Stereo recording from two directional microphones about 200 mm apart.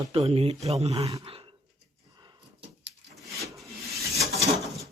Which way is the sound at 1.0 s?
15° right (ahead or behind).